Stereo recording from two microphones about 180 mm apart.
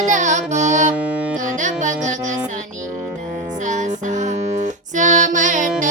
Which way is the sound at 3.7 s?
45° right (ahead or behind).